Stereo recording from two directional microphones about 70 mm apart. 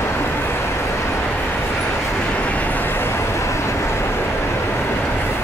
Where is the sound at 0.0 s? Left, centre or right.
Left.